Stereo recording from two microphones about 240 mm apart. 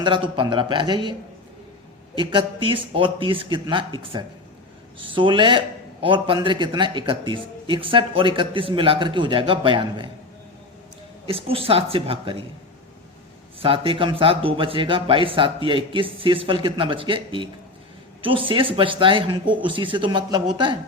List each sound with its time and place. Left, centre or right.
0.0 s a man's voice: centre
2.1 s a man's voice: right
11.3 s a man's voice: right
13.6 s a man's voice: right